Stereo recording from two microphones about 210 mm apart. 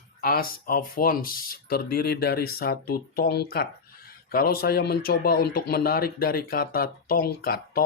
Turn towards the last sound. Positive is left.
turn(degrees=45)  # may be behind; listen again after turning